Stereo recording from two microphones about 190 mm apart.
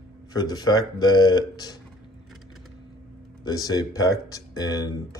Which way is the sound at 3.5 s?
20° left (ahead or behind).